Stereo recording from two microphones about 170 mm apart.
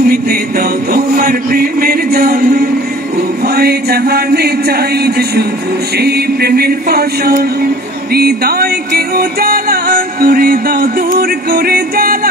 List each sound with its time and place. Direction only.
0.0 s music: 60° right (ahead or behind)